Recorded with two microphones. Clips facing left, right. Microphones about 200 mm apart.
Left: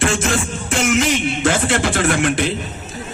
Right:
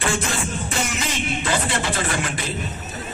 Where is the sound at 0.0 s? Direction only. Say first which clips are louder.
Left 5 dB; 90° left; by 2.5 s 75° left (ahead or behind).